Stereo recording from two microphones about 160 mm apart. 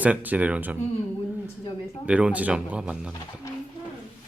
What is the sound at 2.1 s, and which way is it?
Speech, 5° right (ahead or behind).